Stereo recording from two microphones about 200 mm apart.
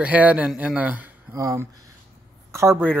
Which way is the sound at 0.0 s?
5° right (ahead or behind).